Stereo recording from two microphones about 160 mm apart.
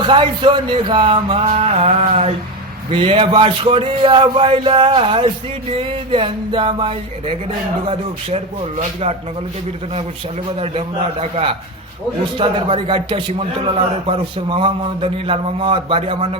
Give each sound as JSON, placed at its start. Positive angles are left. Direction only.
{"t": 0.0, "sound": "a man's voice", "side_deg": -30}
{"t": 8.8, "sound": "a man's voice", "side_deg": -40}
{"t": 10.6, "sound": "a man's voice", "side_deg": -40}